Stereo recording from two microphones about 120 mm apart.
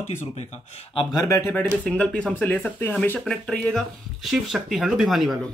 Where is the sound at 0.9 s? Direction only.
30° left (ahead or behind).